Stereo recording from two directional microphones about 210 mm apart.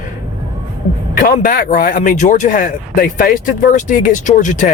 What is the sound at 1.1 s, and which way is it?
Speech, 40° left (ahead or behind).